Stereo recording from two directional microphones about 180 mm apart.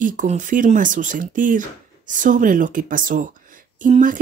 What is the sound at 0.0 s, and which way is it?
Speech, 45° right (ahead or behind).